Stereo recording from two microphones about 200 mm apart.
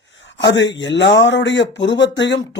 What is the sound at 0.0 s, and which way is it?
Speech, 65° left (ahead or behind).